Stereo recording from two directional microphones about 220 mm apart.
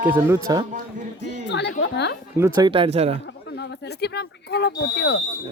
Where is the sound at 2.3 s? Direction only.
15° right (ahead or behind).